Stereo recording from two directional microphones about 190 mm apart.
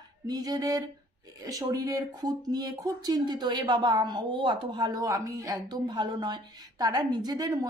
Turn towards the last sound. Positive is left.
turn(degrees=-20)  # may be behind; listen again after turning